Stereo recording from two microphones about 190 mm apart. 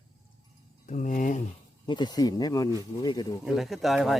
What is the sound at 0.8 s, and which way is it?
Speech, 40° left (ahead or behind).